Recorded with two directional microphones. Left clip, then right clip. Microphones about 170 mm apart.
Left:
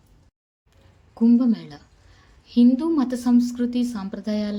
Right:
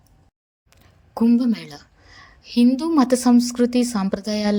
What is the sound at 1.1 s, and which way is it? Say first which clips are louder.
A woman's voice: even; 50° right (ahead or behind).